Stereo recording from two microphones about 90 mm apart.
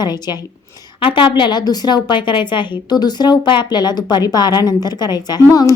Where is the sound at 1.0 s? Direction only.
70° left (ahead or behind).